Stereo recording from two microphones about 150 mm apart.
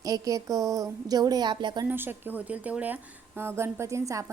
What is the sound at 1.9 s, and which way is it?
A woman's voice, 15° right (ahead or behind).